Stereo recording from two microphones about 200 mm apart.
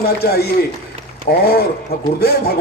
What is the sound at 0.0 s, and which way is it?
A man's voice, 50° left (ahead or behind).